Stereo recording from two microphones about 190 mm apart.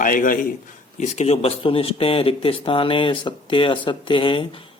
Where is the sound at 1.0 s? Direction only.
35° left (ahead or behind).